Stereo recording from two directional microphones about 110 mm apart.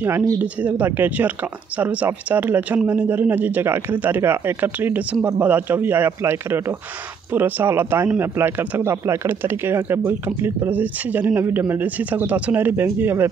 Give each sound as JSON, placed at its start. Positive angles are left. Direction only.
{"t": 0.0, "sound": "speech", "side_deg": -30}
{"t": 0.4, "sound": "speech", "side_deg": -15}